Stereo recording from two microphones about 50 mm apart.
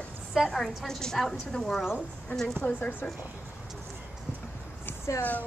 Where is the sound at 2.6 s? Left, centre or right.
Left.